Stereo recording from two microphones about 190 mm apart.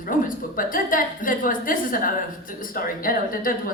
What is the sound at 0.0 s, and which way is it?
Speech, 45° left (ahead or behind).